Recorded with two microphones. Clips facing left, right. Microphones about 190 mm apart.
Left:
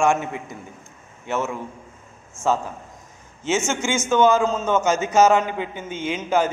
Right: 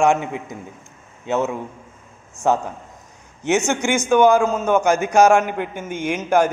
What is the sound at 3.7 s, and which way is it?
A man's voice, 15° right (ahead or behind).